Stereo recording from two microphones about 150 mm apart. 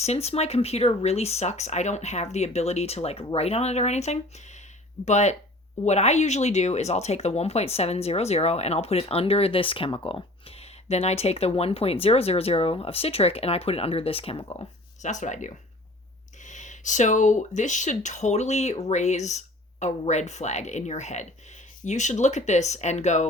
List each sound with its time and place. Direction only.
0.0 s speech: 45° left (ahead or behind)
15.0 s speech: 55° left (ahead or behind)